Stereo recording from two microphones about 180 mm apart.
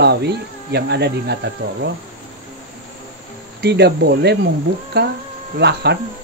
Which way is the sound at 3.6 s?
65° right (ahead or behind).